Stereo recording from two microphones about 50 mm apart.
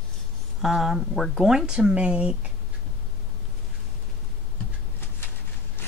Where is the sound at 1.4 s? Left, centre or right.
Centre.